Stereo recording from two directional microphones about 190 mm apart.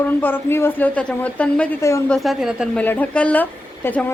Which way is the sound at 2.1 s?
Centre (ahead or behind).